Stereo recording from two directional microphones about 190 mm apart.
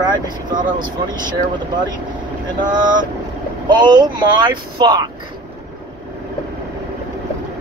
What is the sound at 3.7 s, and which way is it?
A man's voice, 25° right (ahead or behind).